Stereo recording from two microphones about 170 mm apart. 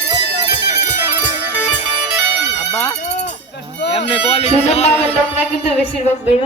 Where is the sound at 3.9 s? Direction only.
35° left (ahead or behind).